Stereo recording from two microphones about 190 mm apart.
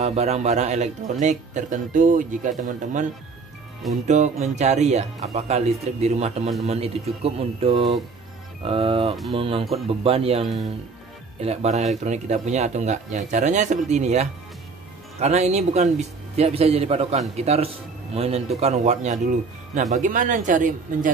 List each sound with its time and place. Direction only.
0.0 s speech: 35° right (ahead or behind)
3.9 s speech: 40° right (ahead or behind)
10.4 s speech: centre (ahead or behind)
11.4 s speech: 35° right (ahead or behind)